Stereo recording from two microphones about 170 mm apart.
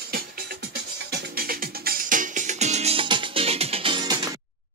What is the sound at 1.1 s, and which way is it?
Music, 60° right (ahead or behind).